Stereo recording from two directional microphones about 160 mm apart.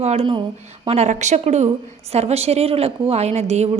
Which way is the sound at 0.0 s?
40° right (ahead or behind).